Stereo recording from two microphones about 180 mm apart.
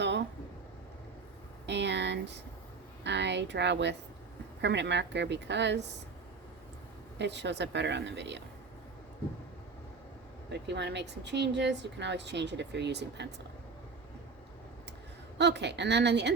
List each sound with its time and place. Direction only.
1.6 s a sound: 75° right (ahead or behind)
3.0 s speech: 75° right (ahead or behind)
7.2 s speech: 75° right (ahead or behind)
10.5 s speech: 70° right (ahead or behind)
15.4 s speech: 70° right (ahead or behind)